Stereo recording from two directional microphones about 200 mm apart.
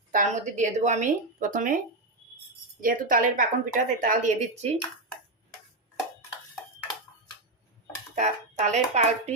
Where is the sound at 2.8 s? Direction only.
45° right (ahead or behind).